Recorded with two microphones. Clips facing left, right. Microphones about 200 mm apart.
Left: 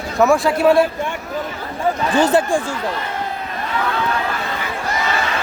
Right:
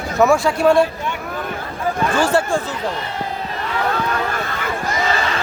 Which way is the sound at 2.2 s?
20° left (ahead or behind).